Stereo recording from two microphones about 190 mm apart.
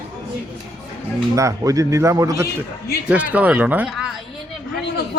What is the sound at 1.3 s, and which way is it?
Speech, 15° right (ahead or behind).